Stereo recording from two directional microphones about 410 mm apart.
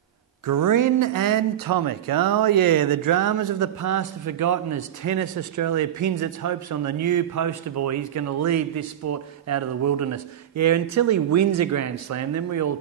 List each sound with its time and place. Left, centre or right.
0.5 s speech: right
10.5 s speech: right